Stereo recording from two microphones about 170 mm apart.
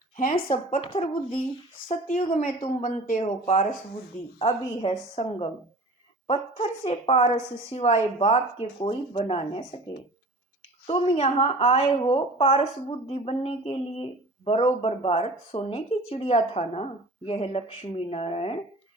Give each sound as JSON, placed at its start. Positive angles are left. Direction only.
{"t": 0.2, "sound": "speech", "side_deg": 50}
{"t": 4.4, "sound": "a woman's voice", "side_deg": 35}
{"t": 10.8, "sound": "a woman's voice", "side_deg": 35}